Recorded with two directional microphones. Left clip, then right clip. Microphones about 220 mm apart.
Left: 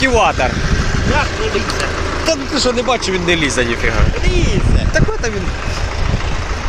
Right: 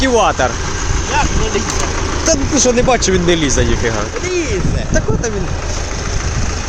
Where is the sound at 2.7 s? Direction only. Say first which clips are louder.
Right 3 dB; 40° right (ahead or behind).